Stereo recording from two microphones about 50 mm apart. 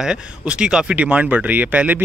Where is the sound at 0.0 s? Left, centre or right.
Centre.